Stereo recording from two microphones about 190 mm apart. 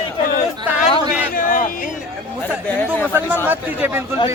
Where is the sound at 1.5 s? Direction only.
45° left (ahead or behind).